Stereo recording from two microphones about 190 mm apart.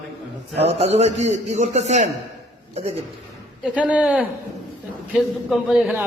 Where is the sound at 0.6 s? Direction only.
35° right (ahead or behind).